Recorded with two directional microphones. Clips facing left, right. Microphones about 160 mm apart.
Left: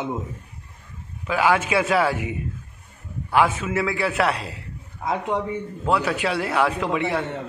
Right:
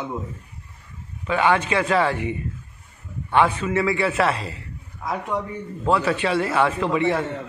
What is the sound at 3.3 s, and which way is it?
A man's voice, centre (ahead or behind).